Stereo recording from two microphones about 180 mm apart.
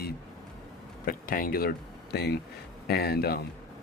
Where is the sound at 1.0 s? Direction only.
55° left (ahead or behind).